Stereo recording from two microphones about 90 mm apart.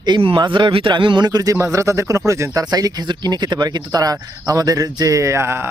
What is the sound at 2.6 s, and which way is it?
Speech, 45° right (ahead or behind).